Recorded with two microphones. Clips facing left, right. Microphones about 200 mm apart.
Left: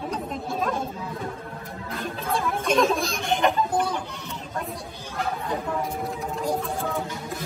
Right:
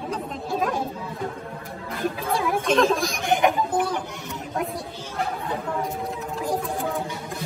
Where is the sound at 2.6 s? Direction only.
Centre (ahead or behind).